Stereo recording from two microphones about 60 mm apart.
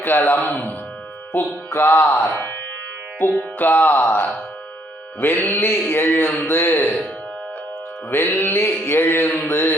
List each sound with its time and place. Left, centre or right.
0.0 s a man's voice: left
8.1 s a man's voice: left